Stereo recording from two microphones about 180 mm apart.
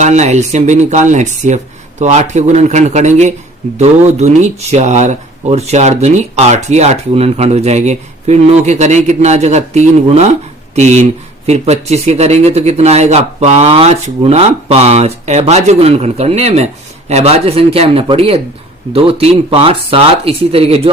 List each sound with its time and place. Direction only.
0.0 s speech: 40° right (ahead or behind)